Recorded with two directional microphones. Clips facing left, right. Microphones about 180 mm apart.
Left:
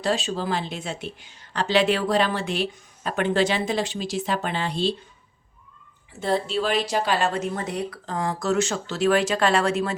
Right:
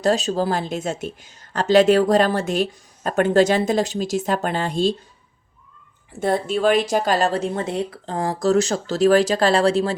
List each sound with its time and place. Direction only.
0.0 s speech: 40° right (ahead or behind)
6.1 s speech: 50° right (ahead or behind); by 9.9 s 30° right (ahead or behind)